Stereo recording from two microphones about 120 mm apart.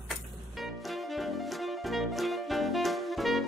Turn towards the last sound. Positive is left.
turn(degrees=0)  # may be behind; listen again after turning